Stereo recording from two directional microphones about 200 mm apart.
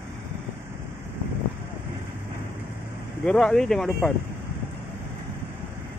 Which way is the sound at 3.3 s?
5° left (ahead or behind).